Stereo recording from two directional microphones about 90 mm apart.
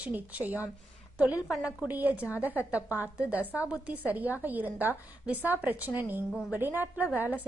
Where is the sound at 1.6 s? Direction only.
15° right (ahead or behind).